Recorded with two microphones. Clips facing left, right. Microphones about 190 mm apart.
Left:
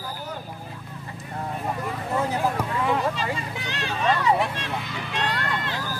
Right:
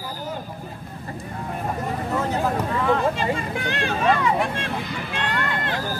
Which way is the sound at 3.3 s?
55° right (ahead or behind).